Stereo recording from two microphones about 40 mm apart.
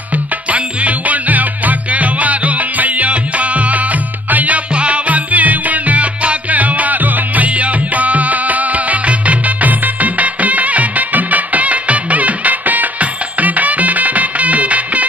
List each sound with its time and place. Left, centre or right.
0.1 s music: right